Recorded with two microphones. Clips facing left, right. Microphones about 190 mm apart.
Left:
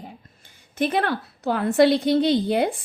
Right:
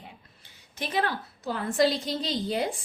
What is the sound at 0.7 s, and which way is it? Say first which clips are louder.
Speech: left 6 dB; 55° left (ahead or behind).